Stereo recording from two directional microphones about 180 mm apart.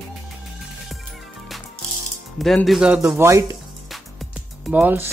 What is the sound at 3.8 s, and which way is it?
Music, centre (ahead or behind).